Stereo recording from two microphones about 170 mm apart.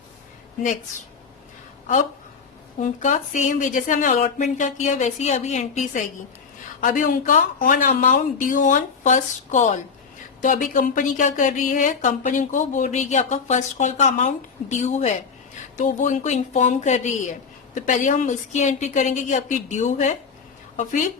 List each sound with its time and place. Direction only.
0.6 s speech: 50° left (ahead or behind)
2.7 s speech: 45° left (ahead or behind)